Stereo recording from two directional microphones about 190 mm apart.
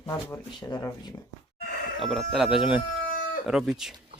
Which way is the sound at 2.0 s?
Centre (ahead or behind).